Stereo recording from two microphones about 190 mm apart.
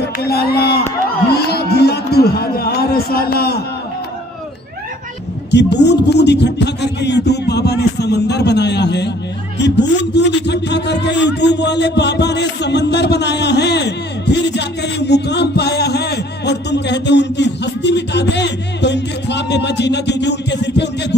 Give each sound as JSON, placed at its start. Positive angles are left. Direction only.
{"t": 0.2, "sound": "a man's voice", "side_deg": 55}
{"t": 5.5, "sound": "a man's voice", "side_deg": 65}